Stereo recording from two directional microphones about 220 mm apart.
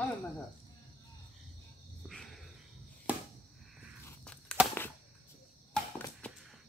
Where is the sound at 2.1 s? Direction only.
Centre (ahead or behind).